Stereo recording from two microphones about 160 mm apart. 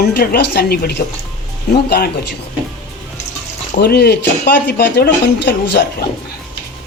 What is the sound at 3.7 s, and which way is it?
Speech, 80° left.